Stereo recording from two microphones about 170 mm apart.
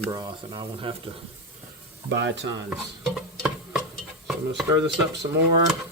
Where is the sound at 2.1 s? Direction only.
90° right.